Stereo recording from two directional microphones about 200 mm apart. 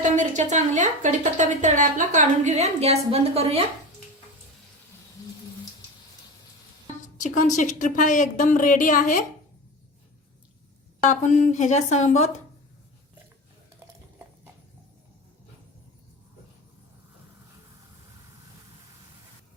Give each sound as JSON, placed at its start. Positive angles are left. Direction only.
{"t": 0.0, "sound": "a woman's voice", "side_deg": -40}
{"t": 7.2, "sound": "a woman's voice", "side_deg": 40}
{"t": 11.0, "sound": "a woman's voice", "side_deg": 40}